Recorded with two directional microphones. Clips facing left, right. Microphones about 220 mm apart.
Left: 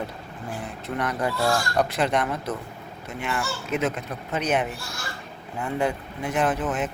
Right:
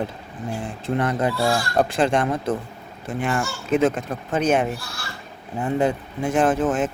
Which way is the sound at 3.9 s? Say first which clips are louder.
Right 5 dB; 50° right (ahead or behind).